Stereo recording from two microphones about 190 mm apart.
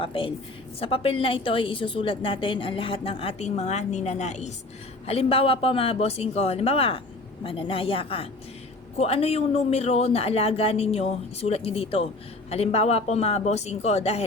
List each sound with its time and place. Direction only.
0.0 s a woman's voice: 30° left (ahead or behind)